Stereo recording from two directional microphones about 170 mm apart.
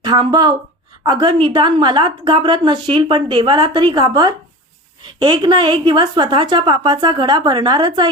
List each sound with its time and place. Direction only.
0.0 s a woman's voice: 25° right (ahead or behind)